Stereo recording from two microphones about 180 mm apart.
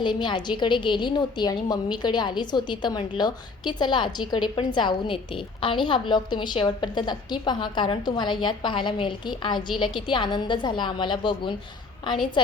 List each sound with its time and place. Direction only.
0.0 s a woman's voice: 25° left (ahead or behind)